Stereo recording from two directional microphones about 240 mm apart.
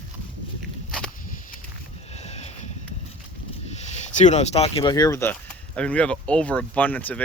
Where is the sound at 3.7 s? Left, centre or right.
Left.